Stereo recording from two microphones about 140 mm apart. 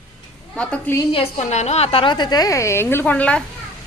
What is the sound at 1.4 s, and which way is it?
A woman's voice, 55° left (ahead or behind).